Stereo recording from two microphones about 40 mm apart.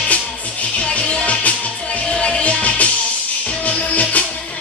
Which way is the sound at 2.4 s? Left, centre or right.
Left.